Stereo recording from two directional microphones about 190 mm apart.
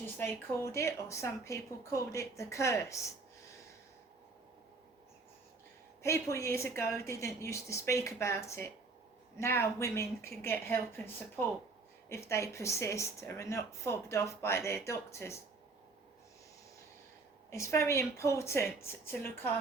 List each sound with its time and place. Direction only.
0.2 s speech: 15° left (ahead or behind)
6.0 s speech: 15° left (ahead or behind)
17.5 s speech: 15° left (ahead or behind)